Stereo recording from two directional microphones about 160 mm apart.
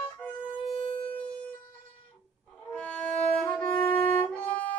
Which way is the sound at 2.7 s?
5° left (ahead or behind).